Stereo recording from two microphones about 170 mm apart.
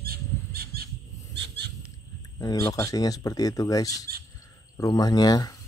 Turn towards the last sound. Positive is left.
turn(degrees=20)  # may be behind; listen again after turning